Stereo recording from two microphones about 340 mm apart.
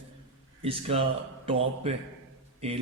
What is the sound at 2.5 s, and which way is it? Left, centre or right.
Speech, centre.